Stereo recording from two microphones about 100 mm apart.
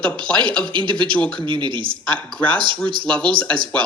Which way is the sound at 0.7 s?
55° right (ahead or behind).